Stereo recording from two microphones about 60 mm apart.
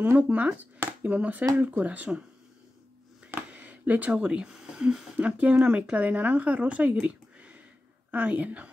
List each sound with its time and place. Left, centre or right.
0.0 s speech: right
3.3 s a sound: right; by 5.0 s centre
5.1 s speech: right